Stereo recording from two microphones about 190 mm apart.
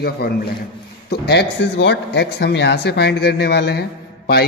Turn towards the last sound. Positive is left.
turn(degrees=55)  # may be behind; listen again after turning